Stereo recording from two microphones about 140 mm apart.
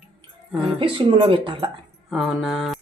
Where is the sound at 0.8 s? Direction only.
35° right (ahead or behind).